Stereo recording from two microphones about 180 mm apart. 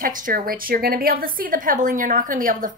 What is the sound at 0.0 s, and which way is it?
A woman's voice, 50° right (ahead or behind).